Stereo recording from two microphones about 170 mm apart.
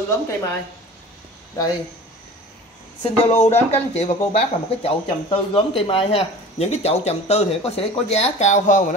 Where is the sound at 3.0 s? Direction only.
35° left (ahead or behind).